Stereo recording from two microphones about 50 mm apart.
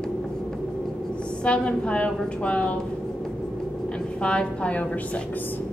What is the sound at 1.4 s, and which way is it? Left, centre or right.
A woman's voice, left.